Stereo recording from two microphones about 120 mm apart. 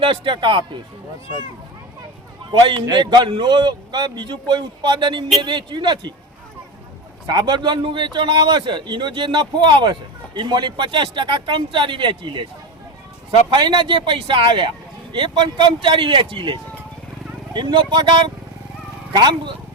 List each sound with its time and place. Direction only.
0.0 s speech: 45° right (ahead or behind)
2.5 s a man's voice: 40° right (ahead or behind)
7.3 s a man's voice: 35° right (ahead or behind)
13.5 s a man's voice: 40° right (ahead or behind)
19.1 s a man's voice: 40° right (ahead or behind)